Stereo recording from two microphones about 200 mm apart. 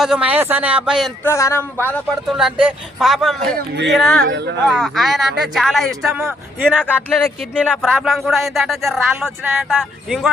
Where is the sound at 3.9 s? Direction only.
5° left (ahead or behind).